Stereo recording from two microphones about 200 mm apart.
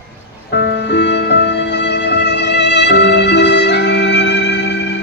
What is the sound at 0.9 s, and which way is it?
Music, 60° left (ahead or behind).